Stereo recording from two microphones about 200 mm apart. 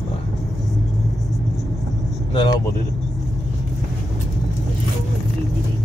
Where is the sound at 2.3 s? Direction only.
25° left (ahead or behind).